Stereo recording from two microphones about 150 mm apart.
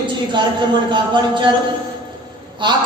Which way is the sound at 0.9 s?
30° right (ahead or behind).